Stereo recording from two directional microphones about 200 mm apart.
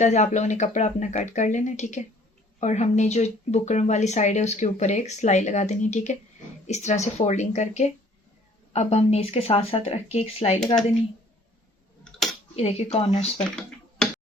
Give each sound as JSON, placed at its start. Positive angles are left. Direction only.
{"t": 0.0, "sound": "speech", "side_deg": 35}
{"t": 12.5, "sound": "speech", "side_deg": 30}